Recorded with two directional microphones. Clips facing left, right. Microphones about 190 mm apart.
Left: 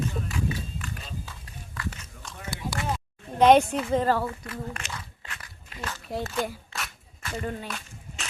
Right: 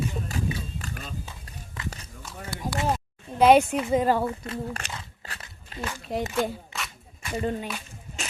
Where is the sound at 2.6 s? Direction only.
40° right (ahead or behind).